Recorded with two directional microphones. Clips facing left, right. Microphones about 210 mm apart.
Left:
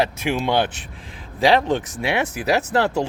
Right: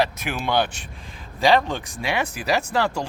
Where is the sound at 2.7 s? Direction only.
20° left (ahead or behind).